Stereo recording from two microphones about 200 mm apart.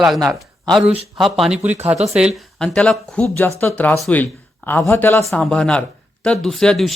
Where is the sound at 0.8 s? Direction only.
30° right (ahead or behind).